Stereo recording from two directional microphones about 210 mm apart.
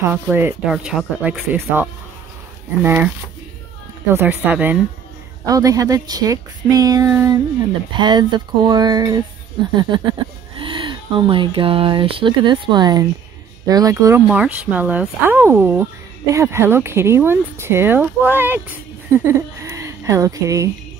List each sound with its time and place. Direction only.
0.0 s speech: 10° right (ahead or behind)
4.1 s a woman's voice: 10° right (ahead or behind)